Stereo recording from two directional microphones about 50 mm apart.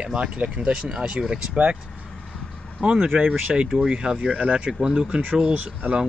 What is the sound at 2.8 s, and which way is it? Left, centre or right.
Speech, right.